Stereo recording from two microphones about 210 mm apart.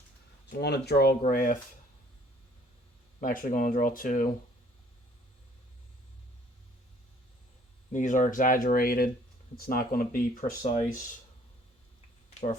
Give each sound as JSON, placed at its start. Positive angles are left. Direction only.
{"t": 0.6, "sound": "speech", "side_deg": 50}
{"t": 3.2, "sound": "speech", "side_deg": 40}
{"t": 7.9, "sound": "speech", "side_deg": 35}